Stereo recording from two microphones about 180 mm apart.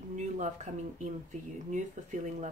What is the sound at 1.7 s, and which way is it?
Speech, 40° right (ahead or behind).